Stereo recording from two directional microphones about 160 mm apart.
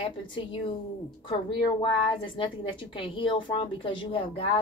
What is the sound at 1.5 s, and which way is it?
A woman's voice, 30° left (ahead or behind).